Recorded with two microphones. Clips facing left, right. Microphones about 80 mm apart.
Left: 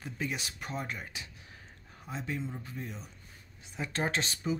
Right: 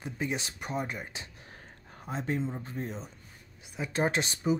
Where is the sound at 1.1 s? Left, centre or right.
Right.